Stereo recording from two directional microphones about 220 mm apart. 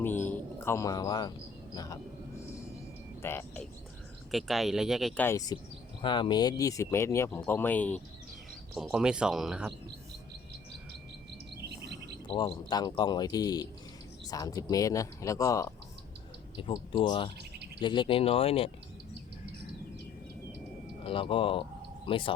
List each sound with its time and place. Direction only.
0.0 s a man's voice: 10° left (ahead or behind)
3.2 s speech: 10° left (ahead or behind)
11.5 s chirp: 50° right (ahead or behind)
12.3 s speech: 20° left (ahead or behind)
21.0 s speech: 25° left (ahead or behind)